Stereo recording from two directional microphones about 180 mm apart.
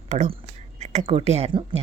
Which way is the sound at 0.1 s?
40° right (ahead or behind).